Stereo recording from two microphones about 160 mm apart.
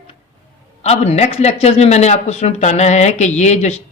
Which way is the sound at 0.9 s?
40° left (ahead or behind).